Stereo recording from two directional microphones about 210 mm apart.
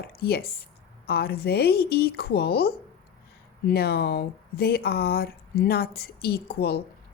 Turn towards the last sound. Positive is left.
turn(degrees=50)  # may be behind; listen again after turning